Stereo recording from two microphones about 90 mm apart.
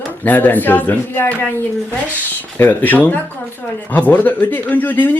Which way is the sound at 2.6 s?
20° left (ahead or behind).